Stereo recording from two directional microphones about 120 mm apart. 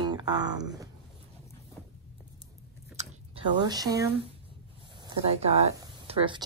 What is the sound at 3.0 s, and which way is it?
Chewing, 70° right (ahead or behind).